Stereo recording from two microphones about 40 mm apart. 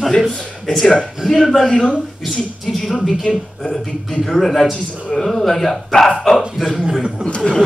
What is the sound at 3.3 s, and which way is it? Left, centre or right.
Speech, left.